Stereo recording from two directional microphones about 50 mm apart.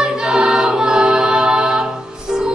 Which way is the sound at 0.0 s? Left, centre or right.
Centre.